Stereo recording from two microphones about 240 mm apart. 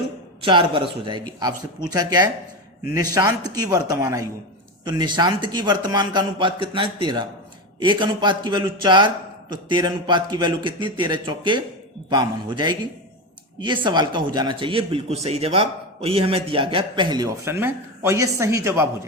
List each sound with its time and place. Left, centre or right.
0.4 s a man's voice: right
13.8 s a man's voice: centre